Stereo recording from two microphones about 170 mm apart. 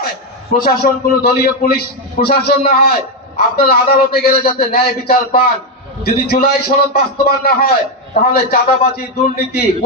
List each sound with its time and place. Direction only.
0.5 s a man's voice: 60° left (ahead or behind)